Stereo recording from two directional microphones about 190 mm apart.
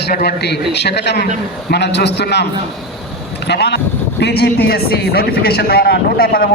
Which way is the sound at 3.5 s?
60° left (ahead or behind).